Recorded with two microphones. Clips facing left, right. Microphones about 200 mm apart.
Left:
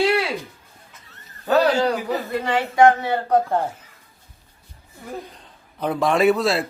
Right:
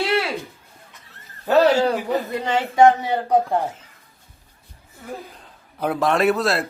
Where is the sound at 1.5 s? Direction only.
25° right (ahead or behind).